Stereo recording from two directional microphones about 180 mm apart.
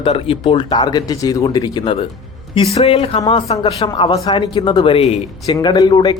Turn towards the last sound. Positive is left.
turn(degrees=25)  # may be behind; listen again after turning